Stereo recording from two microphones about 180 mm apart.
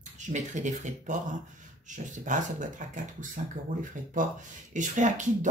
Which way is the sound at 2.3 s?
45° right (ahead or behind).